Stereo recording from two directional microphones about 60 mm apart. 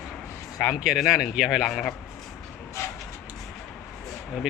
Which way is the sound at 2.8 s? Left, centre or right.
Left.